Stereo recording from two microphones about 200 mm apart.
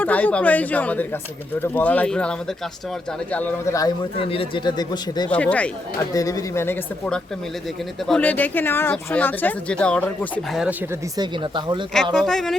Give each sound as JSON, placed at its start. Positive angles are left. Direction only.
{"t": 0.0, "sound": "speech", "side_deg": 10}
{"t": 3.3, "sound": "speech", "side_deg": 10}
{"t": 4.2, "sound": "speech", "side_deg": 30}
{"t": 5.3, "sound": "speech", "side_deg": 5}
{"t": 6.1, "sound": "speech", "side_deg": 15}
{"t": 11.2, "sound": "speech", "side_deg": -20}
{"t": 12.1, "sound": "speech", "side_deg": 5}